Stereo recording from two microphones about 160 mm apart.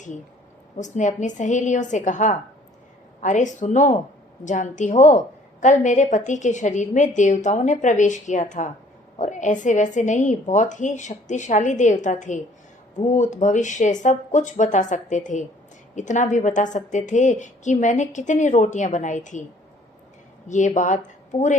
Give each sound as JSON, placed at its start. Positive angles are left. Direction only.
{"t": 0.8, "sound": "a woman's voice", "side_deg": 50}
{"t": 20.5, "sound": "a woman's voice", "side_deg": 50}